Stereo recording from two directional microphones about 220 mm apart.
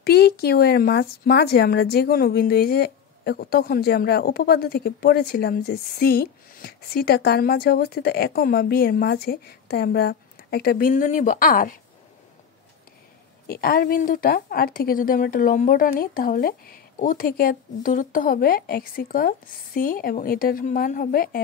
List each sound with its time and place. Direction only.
0.0 s speech: 45° left (ahead or behind)
13.5 s a woman's voice: 40° left (ahead or behind)